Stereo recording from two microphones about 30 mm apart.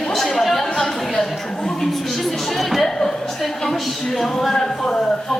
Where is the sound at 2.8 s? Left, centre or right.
Centre.